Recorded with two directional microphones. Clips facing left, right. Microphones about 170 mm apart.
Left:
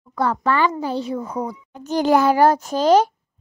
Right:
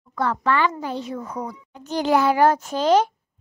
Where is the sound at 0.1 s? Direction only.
35° left (ahead or behind).